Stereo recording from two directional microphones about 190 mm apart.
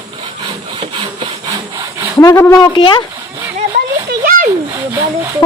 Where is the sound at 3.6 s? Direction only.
45° right (ahead or behind).